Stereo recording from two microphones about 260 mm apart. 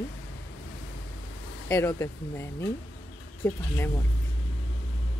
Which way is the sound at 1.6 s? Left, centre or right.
Centre.